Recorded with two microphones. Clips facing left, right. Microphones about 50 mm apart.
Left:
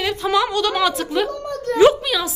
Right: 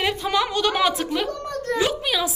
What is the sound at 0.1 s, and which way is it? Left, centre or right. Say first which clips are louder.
A woman's voice: left 4 dB; centre.